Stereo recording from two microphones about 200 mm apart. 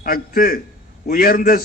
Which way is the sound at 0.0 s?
45° left (ahead or behind).